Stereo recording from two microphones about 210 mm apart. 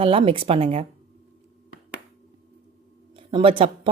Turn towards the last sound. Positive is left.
turn(degrees=-25)  # may be behind; listen again after turning